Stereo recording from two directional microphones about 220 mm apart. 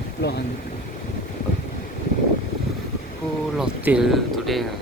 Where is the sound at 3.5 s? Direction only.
5° right (ahead or behind).